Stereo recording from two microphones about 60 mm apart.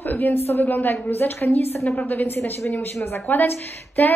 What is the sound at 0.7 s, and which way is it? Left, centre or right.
A woman's voice, left.